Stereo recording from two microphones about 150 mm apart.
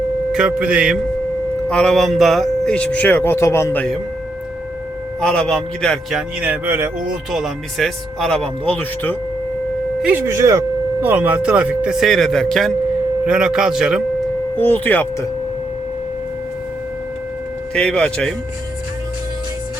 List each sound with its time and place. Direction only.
0.3 s speech: 5° right (ahead or behind)
1.7 s speech: 5° left (ahead or behind)
5.2 s speech: 5° left (ahead or behind); by 6.9 s 15° right (ahead or behind)
7.3 s speech: centre (ahead or behind)
10.0 s speech: 10° right (ahead or behind)
14.5 s speech: 15° left (ahead or behind)
17.7 s speech: 5° left (ahead or behind)